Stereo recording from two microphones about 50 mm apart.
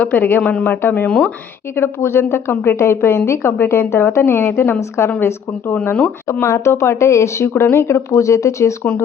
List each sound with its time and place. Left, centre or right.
0.0 s a woman's voice: left
1.7 s a woman's voice: left
3.6 s a woman's voice: left
4.8 s a woman's voice: left
5.7 s speech: left
6.4 s a woman's voice: left
7.5 s speech: left